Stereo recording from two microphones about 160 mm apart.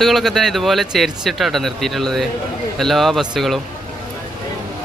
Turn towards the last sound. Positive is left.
turn(degrees=0)  # may be behind; listen again after turning